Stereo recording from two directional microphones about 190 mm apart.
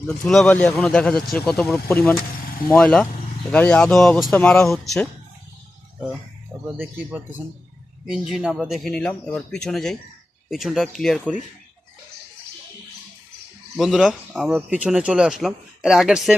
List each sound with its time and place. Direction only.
0.3 s speech: 5° left (ahead or behind)
6.7 s speech: 5° right (ahead or behind)
13.7 s speech: centre (ahead or behind)